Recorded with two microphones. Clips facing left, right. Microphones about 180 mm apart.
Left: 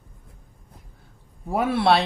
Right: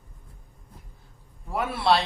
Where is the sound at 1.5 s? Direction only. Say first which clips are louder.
Left 4 dB; 65° left (ahead or behind).